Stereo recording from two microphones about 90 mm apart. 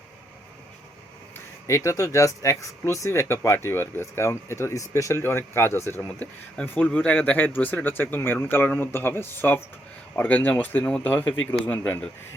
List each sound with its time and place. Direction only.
1.6 s speech: 35° left (ahead or behind)
6.0 s speech: 15° left (ahead or behind)